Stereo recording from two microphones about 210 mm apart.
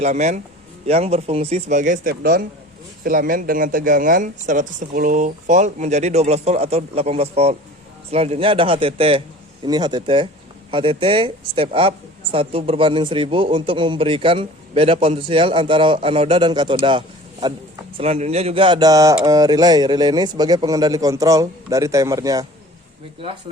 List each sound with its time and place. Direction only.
0.0 s speech: 35° right (ahead or behind); by 22.4 s 15° right (ahead or behind)